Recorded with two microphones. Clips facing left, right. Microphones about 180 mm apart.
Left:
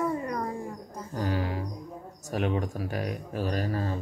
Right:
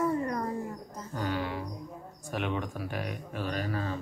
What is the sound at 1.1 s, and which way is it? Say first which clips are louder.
Speech: left 2 dB; 40° left (ahead or behind).